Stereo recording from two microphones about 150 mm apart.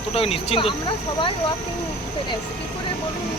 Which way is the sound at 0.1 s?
40° left (ahead or behind).